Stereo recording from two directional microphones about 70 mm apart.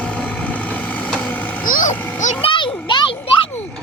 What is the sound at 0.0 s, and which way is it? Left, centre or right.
Vehicle, centre.